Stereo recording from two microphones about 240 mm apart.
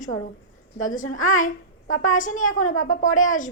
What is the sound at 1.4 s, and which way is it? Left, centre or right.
A woman's voice, left.